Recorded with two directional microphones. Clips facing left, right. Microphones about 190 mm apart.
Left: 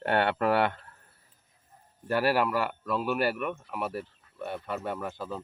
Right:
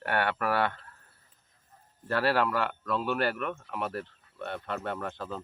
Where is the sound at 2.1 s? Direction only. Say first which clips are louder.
Left 1 dB; 10° left (ahead or behind).